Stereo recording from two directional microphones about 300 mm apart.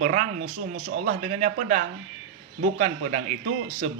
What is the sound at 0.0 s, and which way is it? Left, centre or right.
Speech, right.